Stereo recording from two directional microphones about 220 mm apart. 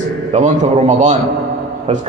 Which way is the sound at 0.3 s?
30° right (ahead or behind).